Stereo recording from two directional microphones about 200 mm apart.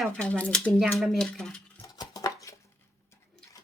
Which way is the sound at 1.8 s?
20° left (ahead or behind).